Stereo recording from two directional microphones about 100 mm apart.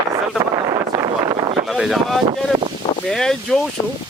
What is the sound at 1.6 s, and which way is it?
Boat, centre (ahead or behind).